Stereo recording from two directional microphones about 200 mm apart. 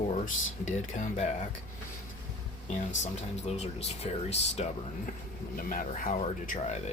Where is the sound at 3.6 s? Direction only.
35° left (ahead or behind).